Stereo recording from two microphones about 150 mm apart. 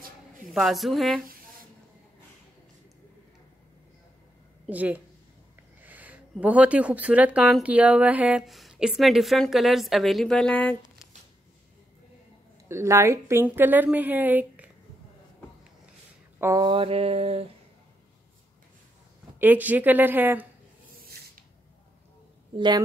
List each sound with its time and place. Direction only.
0.5 s speech: centre (ahead or behind)
4.6 s a woman's voice: 10° right (ahead or behind)
5.8 s a sound: 10° right (ahead or behind)
6.4 s speech: 10° right (ahead or behind); by 10.8 s 10° left (ahead or behind)
12.6 s a woman's voice: 20° right (ahead or behind)
16.3 s speech: 20° right (ahead or behind)
16.6 s mantra: 35° right (ahead or behind)
19.3 s a woman's voice: 10° right (ahead or behind)